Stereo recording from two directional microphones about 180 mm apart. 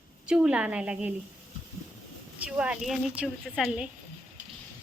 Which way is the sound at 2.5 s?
5° right (ahead or behind).